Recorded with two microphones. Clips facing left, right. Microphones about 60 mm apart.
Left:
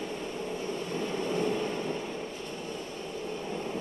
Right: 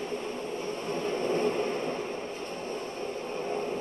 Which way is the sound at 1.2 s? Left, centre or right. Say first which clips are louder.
Right 3 dB; right.